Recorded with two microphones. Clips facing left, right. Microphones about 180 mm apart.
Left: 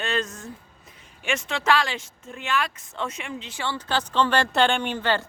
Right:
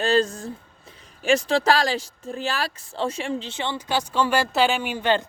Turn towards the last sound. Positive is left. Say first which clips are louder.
# right 2 dB
turn(degrees=-15)  # may be behind; listen again after turning